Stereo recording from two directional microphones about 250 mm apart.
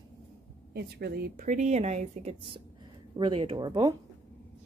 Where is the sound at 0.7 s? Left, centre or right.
Right; by 3.9 s centre.